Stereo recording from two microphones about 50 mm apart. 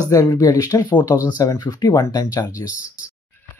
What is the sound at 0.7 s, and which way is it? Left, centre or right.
Speech, left.